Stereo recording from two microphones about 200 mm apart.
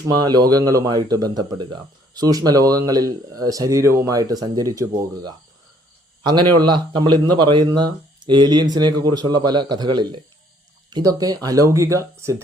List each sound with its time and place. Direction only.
0.1 s speech: 20° right (ahead or behind)